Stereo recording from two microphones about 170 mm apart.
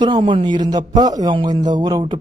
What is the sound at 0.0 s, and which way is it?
Speech, 30° right (ahead or behind).